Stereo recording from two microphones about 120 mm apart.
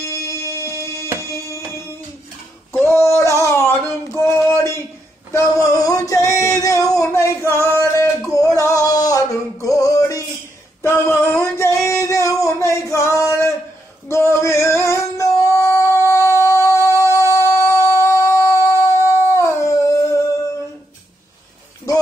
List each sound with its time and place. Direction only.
0.0 s music: 25° left (ahead or behind)
2.7 s a sound: 20° left (ahead or behind)
5.3 s male singing: 25° left (ahead or behind)
7.1 s singing: 20° left (ahead or behind)
7.7 s music: 25° left (ahead or behind)
10.8 s male singing: 20° left (ahead or behind)
11.8 s a sound: 25° left (ahead or behind)
14.0 s male singing: 20° left (ahead or behind)
16.1 s a sound: 25° left (ahead or behind)